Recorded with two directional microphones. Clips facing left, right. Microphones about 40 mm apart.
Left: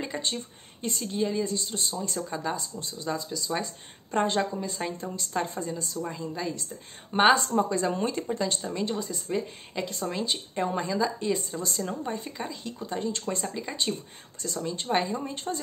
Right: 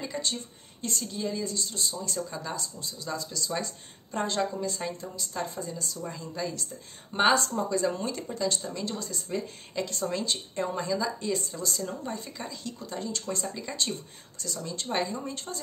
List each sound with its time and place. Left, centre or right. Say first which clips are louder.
0.0 s speech: left 1 dB; left
3.3 s speech: left 2 dB; centre
4.1 s speech: left 5 dB; left
4.4 s speech: left 1 dB; centre
5.3 s a woman's voice: left 4 dB; left
6.0 s speech: even; centre
11.6 s speech: left 2 dB; left
13.6 s speech: left 2 dB; centre
14.4 s speech: left 4 dB; left